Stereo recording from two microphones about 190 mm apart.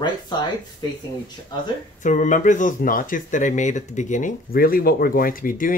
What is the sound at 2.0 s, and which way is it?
Speech, 40° left (ahead or behind).